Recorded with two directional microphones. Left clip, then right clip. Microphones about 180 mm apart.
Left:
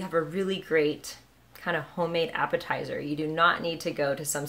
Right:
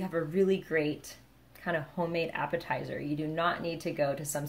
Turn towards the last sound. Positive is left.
turn(degrees=15)  # may be behind; listen again after turning